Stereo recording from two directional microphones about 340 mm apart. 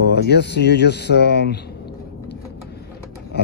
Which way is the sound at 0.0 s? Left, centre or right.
Left.